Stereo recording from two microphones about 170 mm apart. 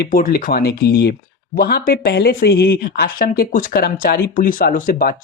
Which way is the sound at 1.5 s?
60° left (ahead or behind).